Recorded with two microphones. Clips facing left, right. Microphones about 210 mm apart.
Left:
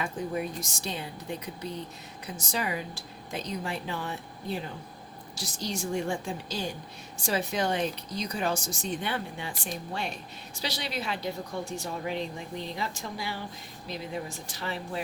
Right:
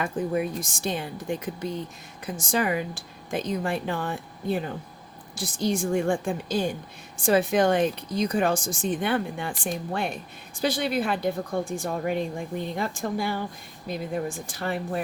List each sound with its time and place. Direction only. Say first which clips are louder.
0.0 s speech: right 5 dB; 55° right (ahead or behind)